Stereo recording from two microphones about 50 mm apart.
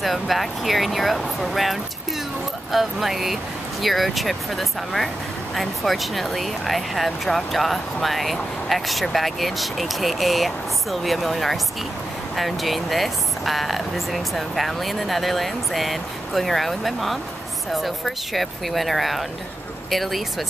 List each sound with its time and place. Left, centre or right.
0.0 s speech: centre